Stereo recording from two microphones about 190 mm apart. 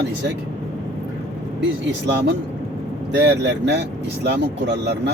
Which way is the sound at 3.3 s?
65° right (ahead or behind).